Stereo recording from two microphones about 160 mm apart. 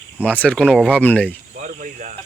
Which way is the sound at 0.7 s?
10° right (ahead or behind).